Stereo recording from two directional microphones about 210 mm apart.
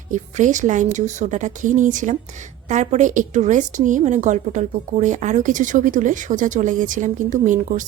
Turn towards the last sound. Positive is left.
turn(degrees=-35)  # may be behind; listen again after turning